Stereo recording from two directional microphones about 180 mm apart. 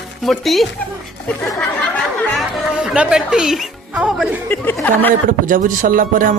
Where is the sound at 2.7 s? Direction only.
5° right (ahead or behind).